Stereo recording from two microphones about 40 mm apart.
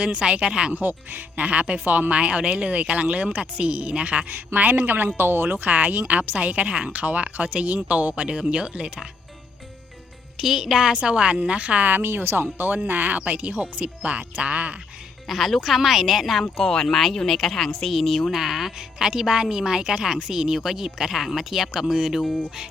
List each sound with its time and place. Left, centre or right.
0.0 s a woman's voice: right
0.7 s speech: right
5.1 s speech: right
5.5 s speech: right
6.9 s a woman's voice: right
10.3 s speech: centre
10.9 s a woman's voice: right
11.9 s speech: right
12.5 s speech: right
13.5 s speech: right
15.3 s a woman's voice: centre
16.4 s a woman's voice: centre
18.3 s a woman's voice: centre
19.0 s speech: centre